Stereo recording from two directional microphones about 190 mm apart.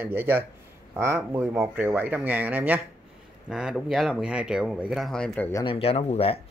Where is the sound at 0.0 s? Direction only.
10° right (ahead or behind).